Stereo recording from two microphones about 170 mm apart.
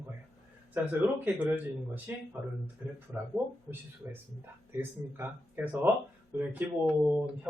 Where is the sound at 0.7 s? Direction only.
10° right (ahead or behind).